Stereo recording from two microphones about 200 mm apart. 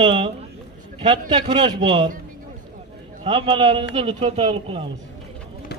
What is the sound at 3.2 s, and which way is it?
A man's voice, 25° right (ahead or behind).